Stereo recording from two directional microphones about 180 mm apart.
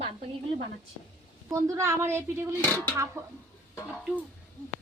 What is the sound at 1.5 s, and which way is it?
Speech, 15° right (ahead or behind).